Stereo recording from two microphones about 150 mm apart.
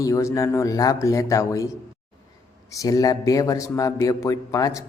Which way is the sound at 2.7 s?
25° left (ahead or behind).